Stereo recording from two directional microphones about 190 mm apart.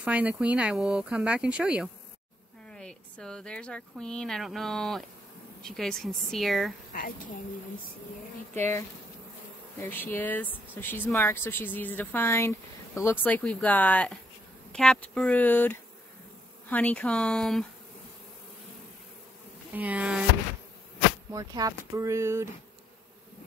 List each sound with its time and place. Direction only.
0.0 s speech: 10° right (ahead or behind)
6.9 s a woman's voice: 45° left (ahead or behind)
8.5 s speech: 10° left (ahead or behind)
19.7 s speech: 10° right (ahead or behind)
21.3 s speech: 20° right (ahead or behind)